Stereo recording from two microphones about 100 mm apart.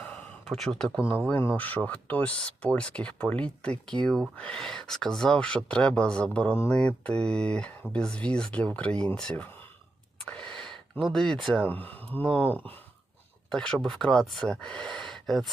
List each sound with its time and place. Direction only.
0.4 s speech: centre (ahead or behind)
0.9 s speech: 15° left (ahead or behind)
10.5 s a sound: 10° left (ahead or behind)
11.4 s speech: 15° left (ahead or behind)